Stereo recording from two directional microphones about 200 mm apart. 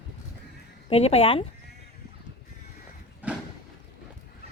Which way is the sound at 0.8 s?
30° left (ahead or behind).